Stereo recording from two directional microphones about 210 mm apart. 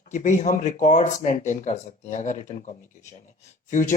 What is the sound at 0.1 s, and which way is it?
Speech, 35° left (ahead or behind).